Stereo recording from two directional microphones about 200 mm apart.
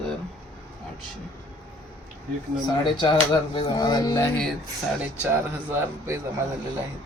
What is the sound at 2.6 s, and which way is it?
Speech, 20° left (ahead or behind).